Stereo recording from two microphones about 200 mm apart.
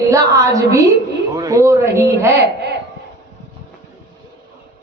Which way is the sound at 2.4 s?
55° right (ahead or behind).